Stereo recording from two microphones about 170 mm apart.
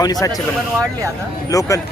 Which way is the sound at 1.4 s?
20° left (ahead or behind).